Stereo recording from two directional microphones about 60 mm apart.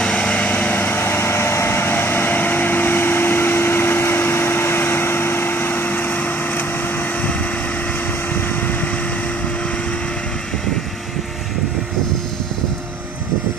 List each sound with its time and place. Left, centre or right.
0.0 s vehicle: centre; by 6.6 s left